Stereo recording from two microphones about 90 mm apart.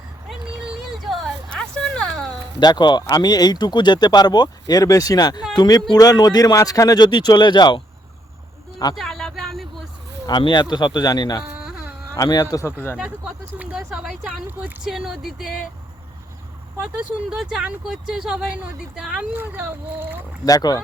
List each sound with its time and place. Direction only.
0.9 s a sound: centre (ahead or behind)
2.6 s speech: 55° left (ahead or behind)
9.0 s a sound: 5° left (ahead or behind)
10.2 s speech: 55° left (ahead or behind)
11.5 s a sound: 15° right (ahead or behind)
12.1 s speech: 40° left (ahead or behind)
13.4 s speech: 15° right (ahead or behind)
13.7 s speech: 5° right (ahead or behind)
17.2 s speech: 5° right (ahead or behind)
19.3 s a child's voice: 25° right (ahead or behind)
20.4 s speech: 45° left (ahead or behind)